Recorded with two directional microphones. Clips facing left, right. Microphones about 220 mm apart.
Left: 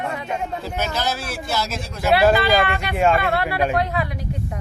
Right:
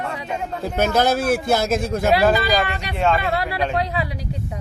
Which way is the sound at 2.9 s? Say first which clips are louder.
Left 1 dB; 10° left (ahead or behind).